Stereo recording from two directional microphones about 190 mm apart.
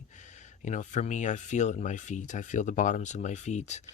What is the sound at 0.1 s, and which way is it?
Speech, 40° left (ahead or behind).